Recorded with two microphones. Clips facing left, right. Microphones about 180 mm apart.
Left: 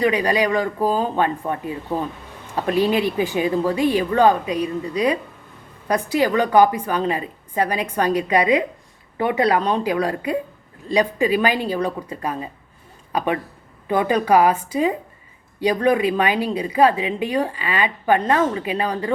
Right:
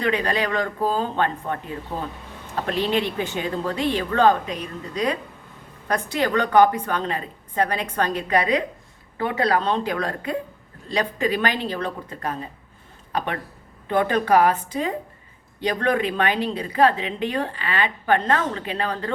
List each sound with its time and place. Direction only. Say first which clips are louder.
0.0 s a woman's voice: left 4 dB; 10° left (ahead or behind)
2.6 s a woman's voice: left 5 dB; 10° left (ahead or behind)